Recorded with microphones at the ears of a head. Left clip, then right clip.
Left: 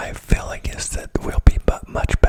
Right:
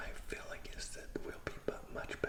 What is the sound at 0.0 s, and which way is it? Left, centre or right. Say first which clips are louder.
Whispering: left 19 dB; left.